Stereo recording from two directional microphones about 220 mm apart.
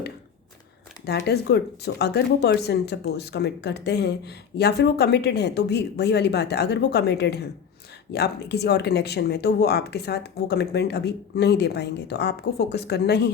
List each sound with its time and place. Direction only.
1.0 s speech: 50° left (ahead or behind)